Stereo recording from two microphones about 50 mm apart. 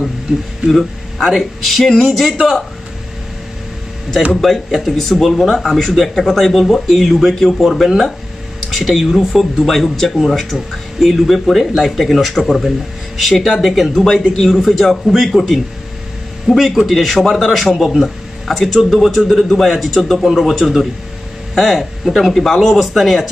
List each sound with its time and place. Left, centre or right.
1.1 s speech: centre
4.4 s a man's voice: centre